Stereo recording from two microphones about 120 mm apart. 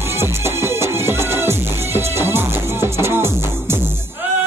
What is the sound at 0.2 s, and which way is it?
Music, 20° right (ahead or behind).